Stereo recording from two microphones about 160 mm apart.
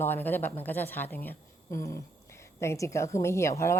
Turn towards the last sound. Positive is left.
turn(degrees=15)  # may be behind; listen again after turning